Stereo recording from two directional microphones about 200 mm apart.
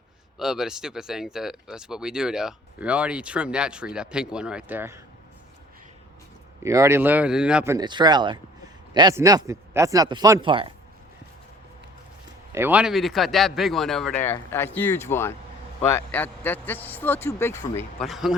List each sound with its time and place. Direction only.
0.3 s speech: centre (ahead or behind)
6.6 s a man's voice: 15° right (ahead or behind)
12.5 s a man's voice: 10° right (ahead or behind); by 17.8 s 10° left (ahead or behind)
18.0 s speech: centre (ahead or behind)